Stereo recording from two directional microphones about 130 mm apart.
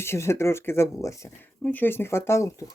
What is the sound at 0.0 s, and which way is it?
Speech, 20° left (ahead or behind).